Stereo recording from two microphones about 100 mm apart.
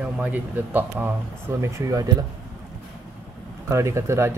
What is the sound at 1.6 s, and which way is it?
Speech, 30° right (ahead or behind).